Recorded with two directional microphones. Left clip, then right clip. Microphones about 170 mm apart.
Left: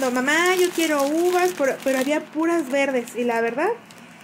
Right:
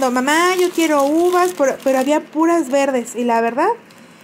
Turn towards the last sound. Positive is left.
turn(degrees=-40)  # may be behind; listen again after turning